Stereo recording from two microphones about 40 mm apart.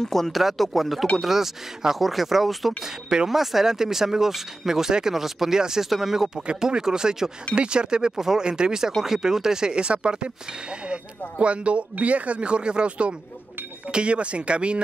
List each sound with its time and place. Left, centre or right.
0.0 s speech: centre
0.3 s speech: centre
2.8 s speech: centre
3.3 s speech: centre; by 14.8 s right